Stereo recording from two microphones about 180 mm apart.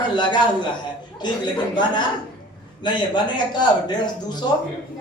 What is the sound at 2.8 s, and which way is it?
A woman's voice, 25° left (ahead or behind).